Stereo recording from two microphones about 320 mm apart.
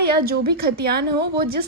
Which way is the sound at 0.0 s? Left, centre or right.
Right.